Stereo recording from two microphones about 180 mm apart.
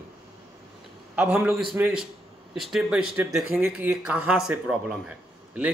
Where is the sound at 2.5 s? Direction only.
Centre (ahead or behind).